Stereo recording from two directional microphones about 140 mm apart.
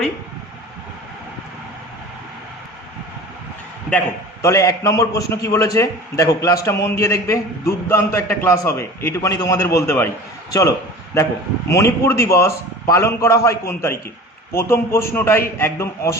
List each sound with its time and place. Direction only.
4.4 s a man's voice: 20° left (ahead or behind)